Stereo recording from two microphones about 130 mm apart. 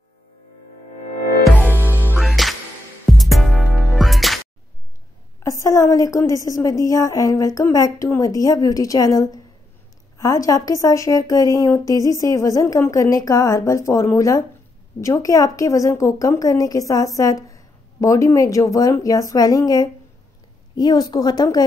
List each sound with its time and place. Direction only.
2.1 s music: centre (ahead or behind)
5.4 s a woman's voice: 25° left (ahead or behind)